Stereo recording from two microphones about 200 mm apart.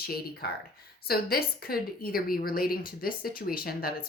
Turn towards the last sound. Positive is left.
turn(degrees=45)  # may be behind; listen again after turning